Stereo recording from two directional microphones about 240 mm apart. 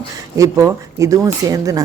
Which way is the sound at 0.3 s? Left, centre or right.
Centre.